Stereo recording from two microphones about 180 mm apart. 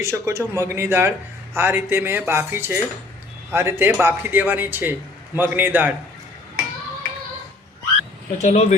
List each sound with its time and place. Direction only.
0.0 s a man's voice: 15° right (ahead or behind)
8.4 s speech: 40° left (ahead or behind)